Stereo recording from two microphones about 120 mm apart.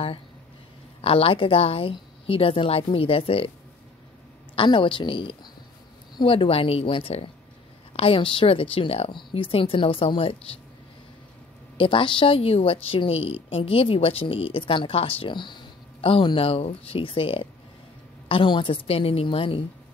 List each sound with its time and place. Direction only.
1.0 s a woman's voice: 50° left (ahead or behind)
4.6 s a woman's voice: 45° left (ahead or behind)
11.7 s a woman's voice: 45° left (ahead or behind)